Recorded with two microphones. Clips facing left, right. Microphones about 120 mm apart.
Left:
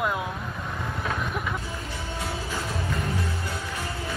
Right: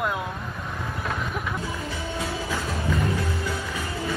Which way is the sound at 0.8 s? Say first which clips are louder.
Even; centre (ahead or behind).